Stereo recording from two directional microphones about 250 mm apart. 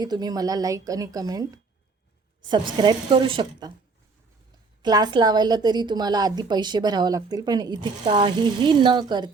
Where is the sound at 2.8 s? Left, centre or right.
Centre.